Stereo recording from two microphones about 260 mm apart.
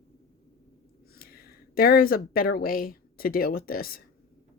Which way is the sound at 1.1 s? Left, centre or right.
Left.